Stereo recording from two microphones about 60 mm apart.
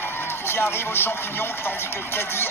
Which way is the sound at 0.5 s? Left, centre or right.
Left.